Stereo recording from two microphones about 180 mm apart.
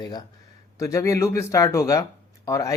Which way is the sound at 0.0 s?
20° left (ahead or behind).